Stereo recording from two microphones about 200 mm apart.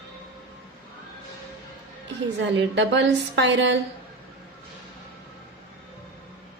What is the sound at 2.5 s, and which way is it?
A woman's voice, 60° right (ahead or behind).